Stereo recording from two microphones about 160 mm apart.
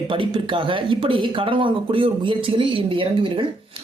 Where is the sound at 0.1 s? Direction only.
30° right (ahead or behind).